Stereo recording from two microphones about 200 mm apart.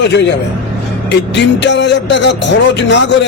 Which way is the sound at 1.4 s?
60° left (ahead or behind).